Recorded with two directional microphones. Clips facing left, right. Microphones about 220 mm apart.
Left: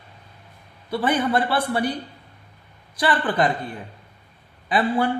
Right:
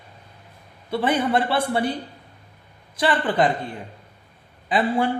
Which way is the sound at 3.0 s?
25° right (ahead or behind).